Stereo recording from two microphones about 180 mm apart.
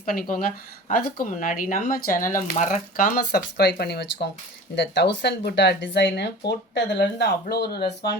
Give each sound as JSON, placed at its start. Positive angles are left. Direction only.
{"t": 0.0, "sound": "speech", "side_deg": 50}